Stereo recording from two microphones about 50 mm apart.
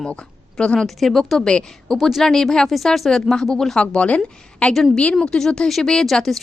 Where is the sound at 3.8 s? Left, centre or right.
Left.